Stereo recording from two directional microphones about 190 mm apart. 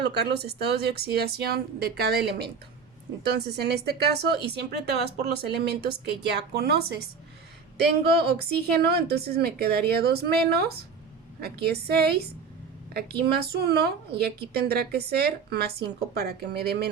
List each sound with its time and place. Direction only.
0.0 s a woman's voice: 60° right (ahead or behind)
8.1 s a woman's voice: 55° right (ahead or behind)